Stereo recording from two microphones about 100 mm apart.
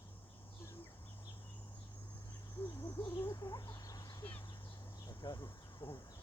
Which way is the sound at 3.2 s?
40° left (ahead or behind).